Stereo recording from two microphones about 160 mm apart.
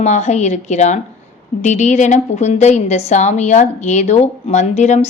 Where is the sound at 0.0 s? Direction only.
45° left (ahead or behind).